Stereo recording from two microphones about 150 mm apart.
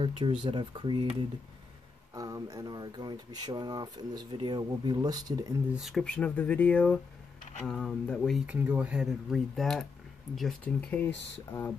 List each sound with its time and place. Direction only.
0.0 s speech: 35° right (ahead or behind)
2.1 s speech: 25° right (ahead or behind)
5.8 s speech: centre (ahead or behind)
8.5 s speech: 10° right (ahead or behind); by 11.7 s 10° left (ahead or behind)